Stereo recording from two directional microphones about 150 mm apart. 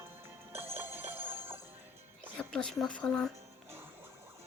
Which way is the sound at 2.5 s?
5° left (ahead or behind).